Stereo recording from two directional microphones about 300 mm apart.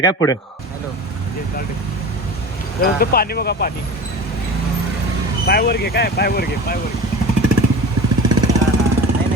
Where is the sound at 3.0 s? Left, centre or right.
Left.